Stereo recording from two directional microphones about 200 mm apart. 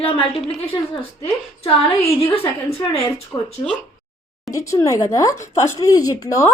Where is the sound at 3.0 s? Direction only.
10° left (ahead or behind).